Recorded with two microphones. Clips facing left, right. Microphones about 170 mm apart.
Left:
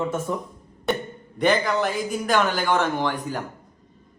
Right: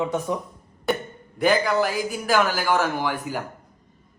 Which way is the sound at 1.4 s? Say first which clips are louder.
Right 1 dB; centre (ahead or behind).